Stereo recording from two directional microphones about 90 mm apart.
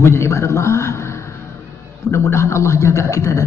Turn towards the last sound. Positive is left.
turn(degrees=35)  # may be behind; listen again after turning